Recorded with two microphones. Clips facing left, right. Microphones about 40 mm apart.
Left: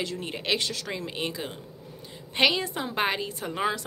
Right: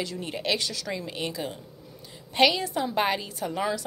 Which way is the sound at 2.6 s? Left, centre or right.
Left.